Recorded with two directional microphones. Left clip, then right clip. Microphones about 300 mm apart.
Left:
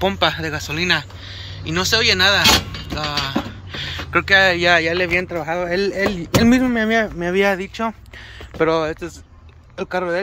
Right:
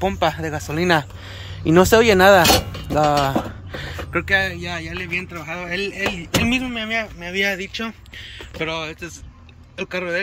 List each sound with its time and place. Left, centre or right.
0.0 s speech: centre
2.9 s a sound: right
4.1 s speech: centre
5.0 s speech: left
5.7 s speech: centre
6.4 s speech: left
6.8 s speech: left
7.3 s speech: centre
9.8 s speech: centre